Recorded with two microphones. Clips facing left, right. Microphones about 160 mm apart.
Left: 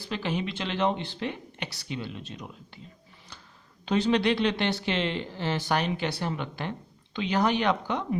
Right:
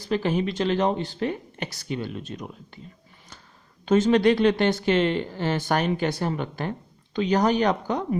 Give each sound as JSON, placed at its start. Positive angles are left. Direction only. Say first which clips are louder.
{"t": 0.0, "sound": "speech", "louder": "right 7 dB", "side_deg": -45}
{"t": 3.8, "sound": "speech", "louder": "right 6 dB", "side_deg": -45}